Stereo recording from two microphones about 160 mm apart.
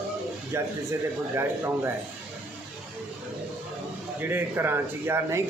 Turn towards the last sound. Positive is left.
turn(degrees=-15)  # may be behind; listen again after turning